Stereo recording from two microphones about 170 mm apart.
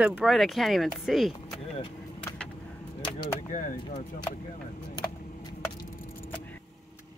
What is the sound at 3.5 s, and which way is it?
Speech, 50° left (ahead or behind).